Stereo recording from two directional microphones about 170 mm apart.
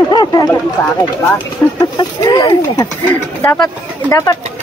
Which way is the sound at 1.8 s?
25° left (ahead or behind).